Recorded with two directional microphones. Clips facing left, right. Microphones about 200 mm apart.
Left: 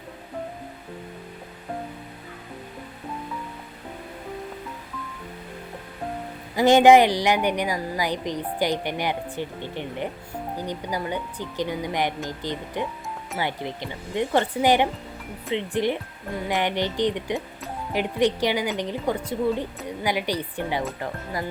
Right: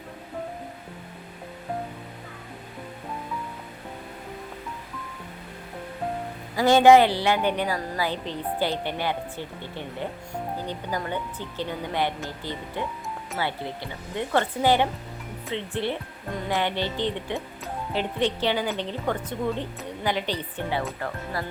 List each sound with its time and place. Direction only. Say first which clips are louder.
6.6 s a woman's voice: left 1 dB; 20° left (ahead or behind)